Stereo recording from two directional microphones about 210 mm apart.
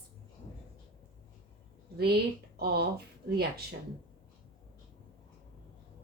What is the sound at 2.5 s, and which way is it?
A woman's voice, 50° right (ahead or behind).